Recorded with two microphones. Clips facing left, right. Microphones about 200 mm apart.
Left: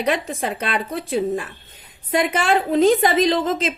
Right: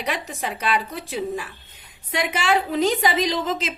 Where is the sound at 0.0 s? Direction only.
50° left (ahead or behind).